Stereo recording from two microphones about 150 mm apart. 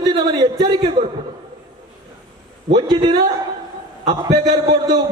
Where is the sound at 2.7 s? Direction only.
30° right (ahead or behind).